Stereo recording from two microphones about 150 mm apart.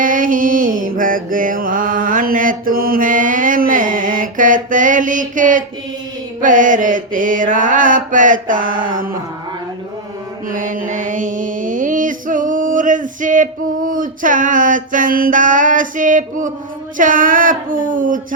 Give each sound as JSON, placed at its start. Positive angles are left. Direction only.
{"t": 0.0, "sound": "mantra", "side_deg": -65}
{"t": 10.5, "sound": "mantra", "side_deg": -60}